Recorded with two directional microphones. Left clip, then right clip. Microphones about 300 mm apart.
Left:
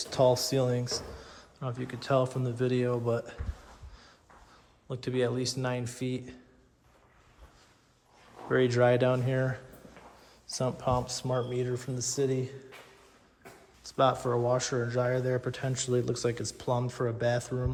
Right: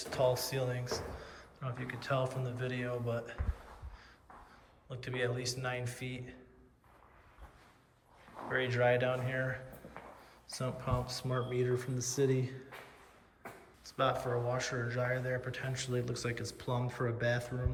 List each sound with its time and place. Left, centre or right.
0.0 s speech: centre
4.9 s speech: centre
8.4 s speech: centre
13.8 s speech: centre